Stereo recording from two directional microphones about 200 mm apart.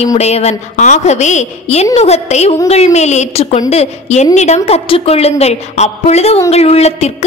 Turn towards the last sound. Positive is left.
turn(degrees=30)  # may be behind; listen again after turning